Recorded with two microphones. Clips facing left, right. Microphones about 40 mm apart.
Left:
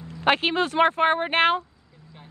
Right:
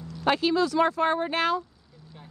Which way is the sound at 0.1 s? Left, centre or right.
Left.